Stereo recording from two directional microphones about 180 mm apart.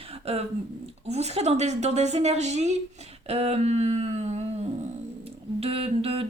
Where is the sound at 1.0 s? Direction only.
35° right (ahead or behind).